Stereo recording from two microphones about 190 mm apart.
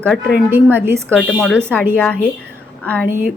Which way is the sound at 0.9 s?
10° right (ahead or behind).